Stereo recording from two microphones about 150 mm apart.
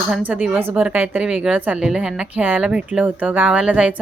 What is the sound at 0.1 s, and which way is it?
Speech, 10° right (ahead or behind).